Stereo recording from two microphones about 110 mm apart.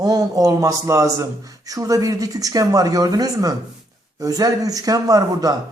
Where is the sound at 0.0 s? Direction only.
35° right (ahead or behind).